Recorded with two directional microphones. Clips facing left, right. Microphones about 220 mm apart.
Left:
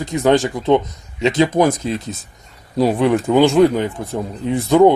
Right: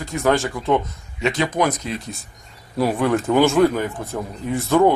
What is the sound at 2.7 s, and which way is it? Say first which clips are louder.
Speech: left 4 dB; 20° left (ahead or behind).